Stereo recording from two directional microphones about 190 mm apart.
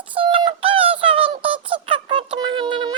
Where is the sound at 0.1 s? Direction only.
30° right (ahead or behind).